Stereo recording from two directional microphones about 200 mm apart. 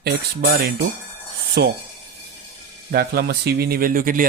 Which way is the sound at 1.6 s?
55° right (ahead or behind).